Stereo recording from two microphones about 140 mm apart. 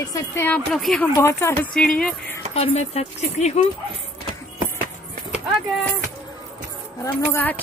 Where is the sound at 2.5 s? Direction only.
50° left (ahead or behind).